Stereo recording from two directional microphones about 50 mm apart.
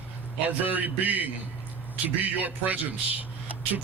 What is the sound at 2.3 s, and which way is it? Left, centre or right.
Speech, right.